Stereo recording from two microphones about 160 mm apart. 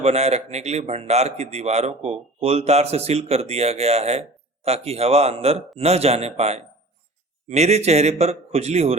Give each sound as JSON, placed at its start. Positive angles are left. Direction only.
{"t": 0.0, "sound": "a man's voice", "side_deg": -40}